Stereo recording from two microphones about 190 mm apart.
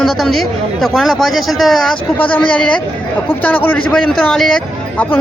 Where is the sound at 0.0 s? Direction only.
Centre (ahead or behind).